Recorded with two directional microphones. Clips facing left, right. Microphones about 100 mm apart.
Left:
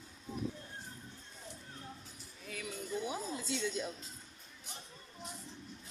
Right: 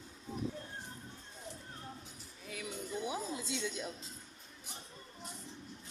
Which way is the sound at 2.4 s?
10° right (ahead or behind).